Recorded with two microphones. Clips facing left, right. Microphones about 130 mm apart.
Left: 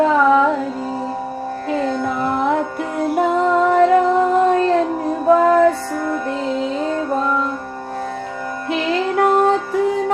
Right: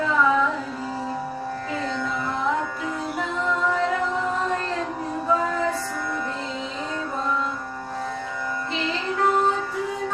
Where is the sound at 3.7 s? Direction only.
60° left (ahead or behind).